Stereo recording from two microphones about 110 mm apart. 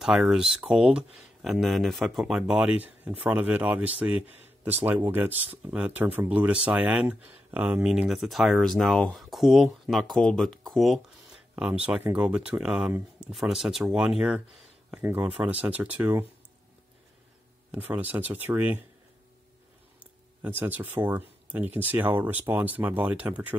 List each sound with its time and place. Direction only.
0.0 s speech: 5° right (ahead or behind)
8.1 s speech: centre (ahead or behind)
11.5 s speech: 10° right (ahead or behind)
17.6 s speech: 15° right (ahead or behind)
20.4 s speech: 20° right (ahead or behind)